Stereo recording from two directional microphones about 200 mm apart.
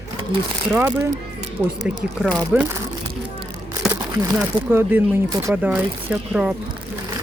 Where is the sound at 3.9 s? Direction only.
15° right (ahead or behind).